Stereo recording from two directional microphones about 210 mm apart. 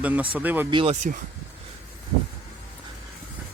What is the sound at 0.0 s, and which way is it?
Speech, 5° right (ahead or behind).